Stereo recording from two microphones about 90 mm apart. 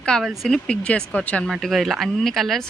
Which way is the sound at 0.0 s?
10° left (ahead or behind).